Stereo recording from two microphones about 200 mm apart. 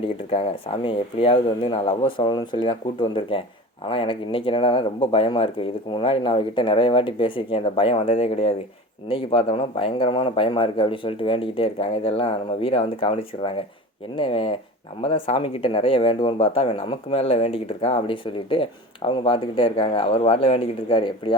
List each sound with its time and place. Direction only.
0.0 s speech: 30° left (ahead or behind)